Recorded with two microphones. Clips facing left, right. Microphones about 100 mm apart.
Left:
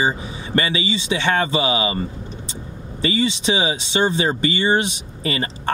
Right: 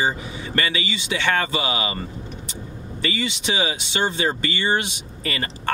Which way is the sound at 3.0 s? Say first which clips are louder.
Left 6 dB; 20° left (ahead or behind).